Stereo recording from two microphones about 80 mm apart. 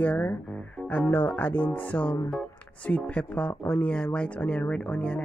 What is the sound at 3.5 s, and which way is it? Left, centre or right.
Speech, left.